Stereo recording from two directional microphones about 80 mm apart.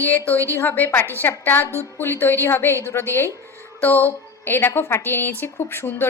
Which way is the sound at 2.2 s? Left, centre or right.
Left.